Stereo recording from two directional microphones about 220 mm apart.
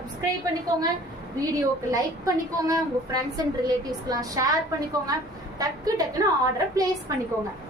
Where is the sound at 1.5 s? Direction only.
15° right (ahead or behind).